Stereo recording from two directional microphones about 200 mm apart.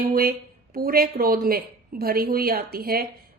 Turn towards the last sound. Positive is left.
turn(degrees=-50)  # may be behind; listen again after turning